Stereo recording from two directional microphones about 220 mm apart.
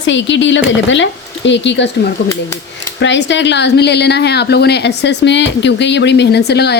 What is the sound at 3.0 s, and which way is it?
Speech, 55° left (ahead or behind).